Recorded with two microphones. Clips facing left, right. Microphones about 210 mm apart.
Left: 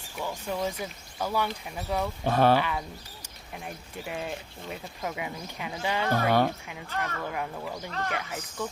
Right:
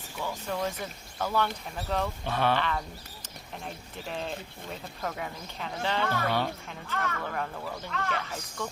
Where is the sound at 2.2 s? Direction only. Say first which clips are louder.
Left 8 dB; 40° left (ahead or behind).